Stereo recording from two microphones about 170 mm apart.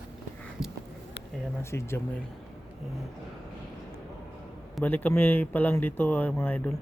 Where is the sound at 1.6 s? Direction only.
15° left (ahead or behind).